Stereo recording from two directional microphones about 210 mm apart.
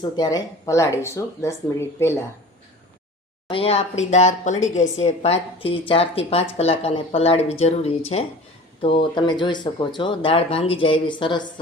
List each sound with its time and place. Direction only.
0.0 s speech: 20° left (ahead or behind)
3.4 s a woman's voice: 25° left (ahead or behind)